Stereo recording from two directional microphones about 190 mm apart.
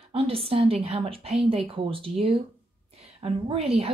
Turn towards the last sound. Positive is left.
turn(degrees=-30)  # may be behind; listen again after turning